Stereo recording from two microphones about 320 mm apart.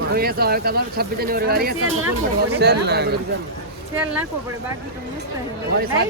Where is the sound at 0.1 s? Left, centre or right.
Right.